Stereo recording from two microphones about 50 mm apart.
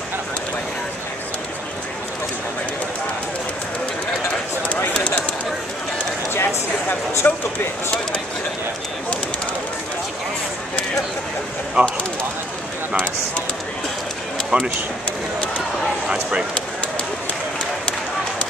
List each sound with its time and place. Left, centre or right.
6.3 s a sound: left
11.8 s speech: centre
14.5 s speech: right
16.1 s speech: centre